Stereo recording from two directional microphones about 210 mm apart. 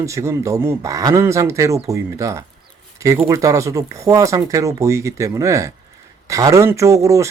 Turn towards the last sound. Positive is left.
turn(degrees=-15)  # may be behind; listen again after turning